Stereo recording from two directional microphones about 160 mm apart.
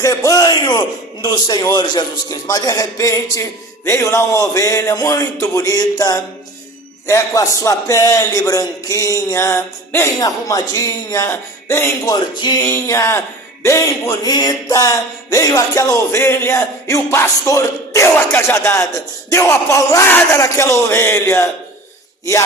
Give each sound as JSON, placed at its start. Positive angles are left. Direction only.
{"t": 0.0, "sound": "a man's voice", "side_deg": 20}